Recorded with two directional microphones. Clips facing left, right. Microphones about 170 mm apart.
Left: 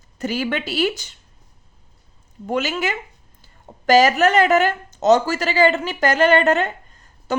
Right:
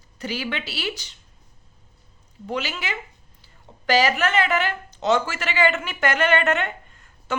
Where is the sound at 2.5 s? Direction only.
45° left (ahead or behind).